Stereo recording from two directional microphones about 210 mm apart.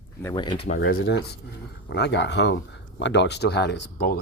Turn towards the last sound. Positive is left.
turn(degrees=55)  # may be behind; listen again after turning